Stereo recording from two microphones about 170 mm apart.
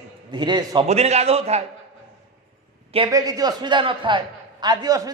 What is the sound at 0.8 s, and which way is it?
Speech, 40° right (ahead or behind).